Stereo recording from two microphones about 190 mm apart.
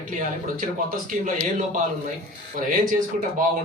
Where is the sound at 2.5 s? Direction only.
45° right (ahead or behind).